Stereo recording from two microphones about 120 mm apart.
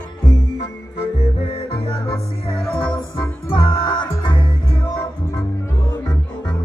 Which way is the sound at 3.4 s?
45° left (ahead or behind).